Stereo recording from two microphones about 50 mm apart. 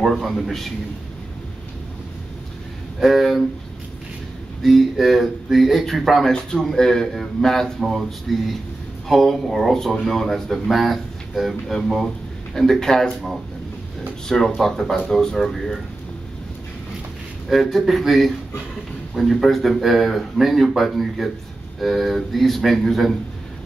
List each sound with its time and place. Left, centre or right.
0.0 s speech: centre
3.0 s speech: centre
4.6 s speech: centre
6.2 s a man's voice: centre
12.8 s a man's voice: centre
14.2 s a man's voice: centre
17.5 s speech: centre